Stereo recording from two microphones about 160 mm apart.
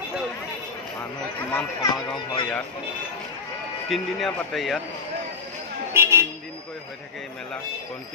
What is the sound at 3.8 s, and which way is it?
Speech, centre (ahead or behind).